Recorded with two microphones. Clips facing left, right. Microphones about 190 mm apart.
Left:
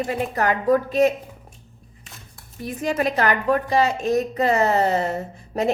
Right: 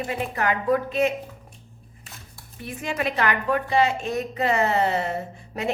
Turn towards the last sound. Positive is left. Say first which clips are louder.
# left 6 dB
turn(degrees=40)  # may be behind; listen again after turning